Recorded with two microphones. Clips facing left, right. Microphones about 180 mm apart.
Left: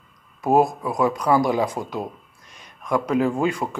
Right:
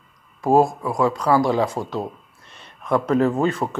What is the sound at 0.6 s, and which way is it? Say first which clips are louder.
Speech: right 1 dB; 20° left (ahead or behind).